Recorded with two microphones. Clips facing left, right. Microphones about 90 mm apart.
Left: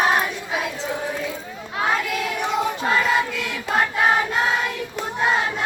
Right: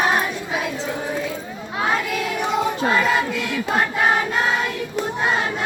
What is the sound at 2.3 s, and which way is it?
Child singing, 10° right (ahead or behind).